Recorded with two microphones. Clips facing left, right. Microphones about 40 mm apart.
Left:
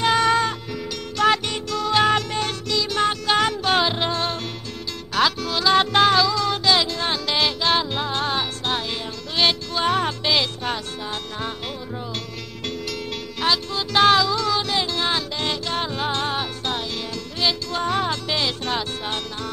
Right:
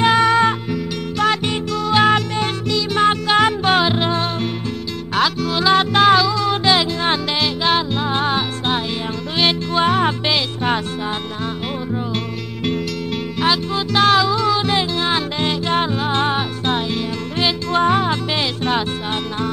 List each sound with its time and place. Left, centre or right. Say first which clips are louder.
0.0 s music: right 5 dB; centre
6.5 s music: right 3 dB; right
7.6 s music: right 3 dB; centre
8.1 s music: right 5 dB; centre
9.8 s music: right 5 dB; right
13.4 s music: right 4 dB; centre
13.9 s music: right 1 dB; centre
14.2 s music: right 5 dB; centre